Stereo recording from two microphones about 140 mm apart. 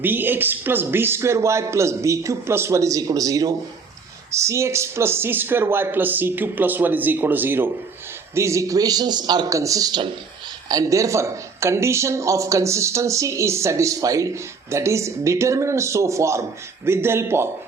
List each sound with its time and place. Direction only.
0.0 s speech: 15° right (ahead or behind)